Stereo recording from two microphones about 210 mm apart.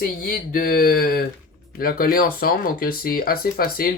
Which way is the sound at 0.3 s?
45° left (ahead or behind).